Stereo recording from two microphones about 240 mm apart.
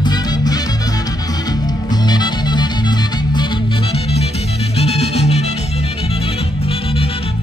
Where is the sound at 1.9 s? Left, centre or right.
Centre.